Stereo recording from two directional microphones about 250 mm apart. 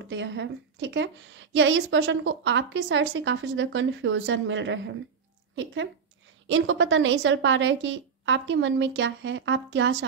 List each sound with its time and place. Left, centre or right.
0.0 s a woman's voice: right
6.4 s a woman's voice: right